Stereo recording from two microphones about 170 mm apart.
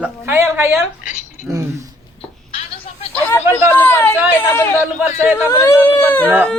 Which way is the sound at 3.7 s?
10° left (ahead or behind).